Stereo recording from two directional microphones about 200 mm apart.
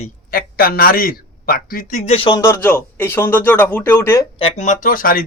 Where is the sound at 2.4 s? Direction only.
15° left (ahead or behind).